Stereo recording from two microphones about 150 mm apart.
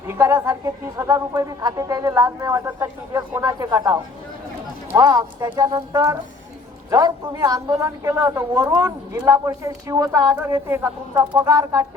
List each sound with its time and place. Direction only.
0.1 s speech: 20° right (ahead or behind)